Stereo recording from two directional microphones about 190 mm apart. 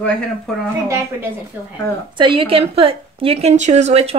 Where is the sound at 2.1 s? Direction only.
25° right (ahead or behind).